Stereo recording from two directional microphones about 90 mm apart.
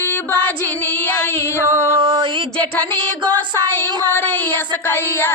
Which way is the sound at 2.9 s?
60° right (ahead or behind).